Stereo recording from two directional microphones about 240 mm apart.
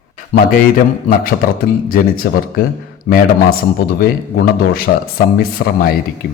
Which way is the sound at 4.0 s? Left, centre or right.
Left.